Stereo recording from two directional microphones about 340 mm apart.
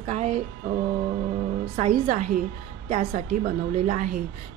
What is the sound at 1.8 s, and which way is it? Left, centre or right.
A woman's voice, right.